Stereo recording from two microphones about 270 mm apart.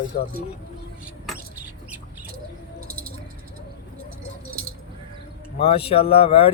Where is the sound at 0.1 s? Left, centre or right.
Left.